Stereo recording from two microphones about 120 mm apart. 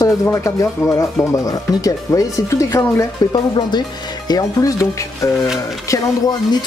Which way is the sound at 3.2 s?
35° left (ahead or behind).